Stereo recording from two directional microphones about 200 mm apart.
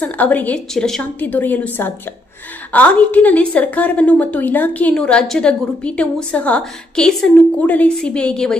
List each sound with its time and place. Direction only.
0.0 s a woman's voice: 10° left (ahead or behind)